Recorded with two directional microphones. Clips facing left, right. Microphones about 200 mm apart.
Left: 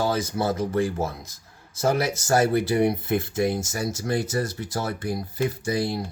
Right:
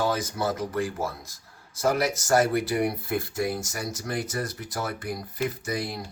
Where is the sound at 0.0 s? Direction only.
30° left (ahead or behind).